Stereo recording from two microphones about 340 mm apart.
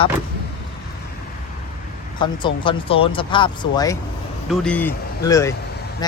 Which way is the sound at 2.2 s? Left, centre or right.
Centre.